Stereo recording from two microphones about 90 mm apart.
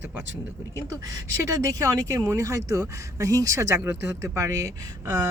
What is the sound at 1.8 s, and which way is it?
Speech, 35° right (ahead or behind).